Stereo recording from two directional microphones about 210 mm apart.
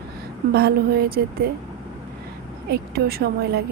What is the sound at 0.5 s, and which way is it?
Speech, 45° right (ahead or behind).